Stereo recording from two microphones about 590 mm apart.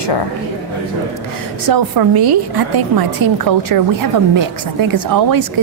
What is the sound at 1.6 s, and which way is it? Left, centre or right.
A woman's voice, right.